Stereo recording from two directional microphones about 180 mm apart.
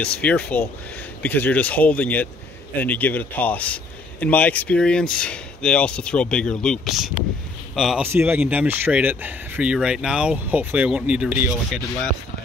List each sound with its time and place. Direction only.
0.0 s speech: 5° left (ahead or behind)
8.1 s speech: 10° right (ahead or behind)